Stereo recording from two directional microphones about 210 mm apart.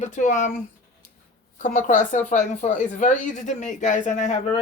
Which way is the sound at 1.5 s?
40° left (ahead or behind).